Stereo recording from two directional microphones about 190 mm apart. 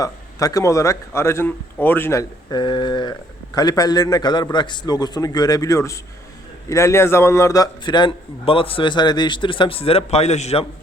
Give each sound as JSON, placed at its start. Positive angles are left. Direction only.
{"t": 0.0, "sound": "a man's voice", "side_deg": 20}